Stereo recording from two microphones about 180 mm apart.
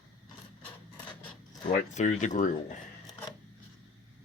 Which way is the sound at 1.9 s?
40° left (ahead or behind).